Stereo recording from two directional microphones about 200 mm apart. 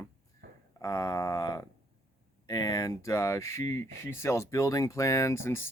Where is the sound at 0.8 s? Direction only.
15° left (ahead or behind).